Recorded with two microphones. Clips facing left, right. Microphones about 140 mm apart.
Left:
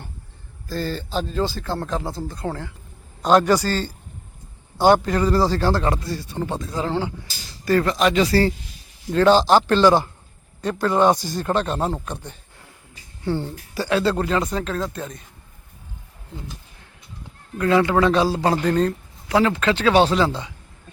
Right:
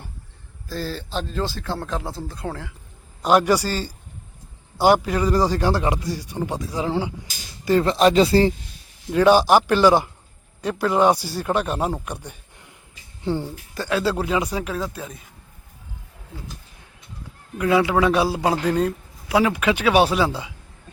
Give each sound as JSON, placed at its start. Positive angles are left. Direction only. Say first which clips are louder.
{"t": 0.7, "sound": "a man's voice", "louder": "left 2 dB", "side_deg": 0}
{"t": 7.9, "sound": "speech", "louder": "right 3 dB", "side_deg": -35}
{"t": 8.3, "sound": "a man's voice", "louder": "right 2 dB", "side_deg": -20}
{"t": 13.7, "sound": "speech", "louder": "left 2 dB", "side_deg": 0}
{"t": 17.6, "sound": "a man's voice", "louder": "left 1 dB", "side_deg": -10}